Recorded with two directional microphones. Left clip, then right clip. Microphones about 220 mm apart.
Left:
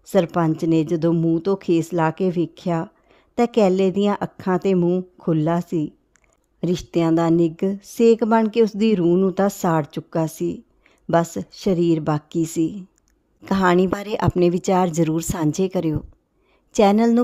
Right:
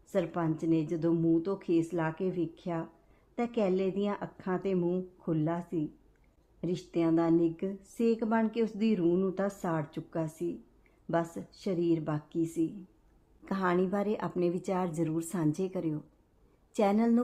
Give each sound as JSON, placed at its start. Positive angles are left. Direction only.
{"t": 0.1, "sound": "speech", "side_deg": 50}